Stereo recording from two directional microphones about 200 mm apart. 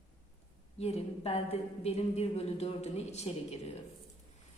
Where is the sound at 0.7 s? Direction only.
30° left (ahead or behind).